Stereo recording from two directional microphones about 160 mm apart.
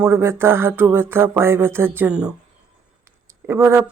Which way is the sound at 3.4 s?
15° right (ahead or behind).